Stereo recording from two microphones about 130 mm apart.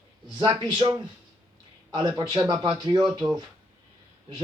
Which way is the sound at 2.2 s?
35° right (ahead or behind).